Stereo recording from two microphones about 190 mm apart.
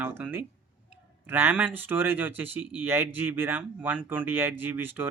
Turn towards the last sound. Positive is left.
turn(degrees=-10)  # may be behind; listen again after turning